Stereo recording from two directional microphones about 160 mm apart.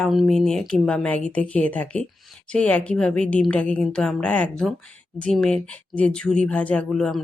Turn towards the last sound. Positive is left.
turn(degrees=5)  # may be behind; listen again after turning